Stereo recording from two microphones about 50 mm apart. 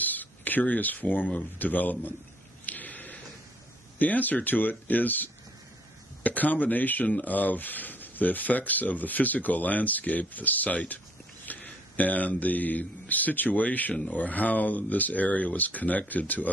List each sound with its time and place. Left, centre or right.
0.0 s speech: left
2.6 s a sound: left
4.0 s speech: left